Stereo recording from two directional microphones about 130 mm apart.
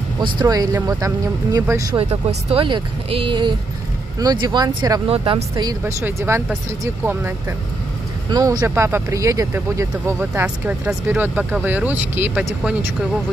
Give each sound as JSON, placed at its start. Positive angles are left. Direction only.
{"t": 0.2, "sound": "speech", "side_deg": -30}
{"t": 2.0, "sound": "speech", "side_deg": -45}
{"t": 5.0, "sound": "speech", "side_deg": -45}
{"t": 5.7, "sound": "speech", "side_deg": -25}
{"t": 10.4, "sound": "speech", "side_deg": -10}